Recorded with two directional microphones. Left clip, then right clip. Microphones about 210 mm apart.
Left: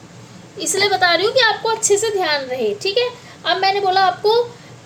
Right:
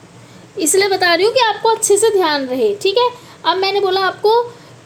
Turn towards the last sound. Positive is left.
turn(degrees=-25)  # may be behind; listen again after turning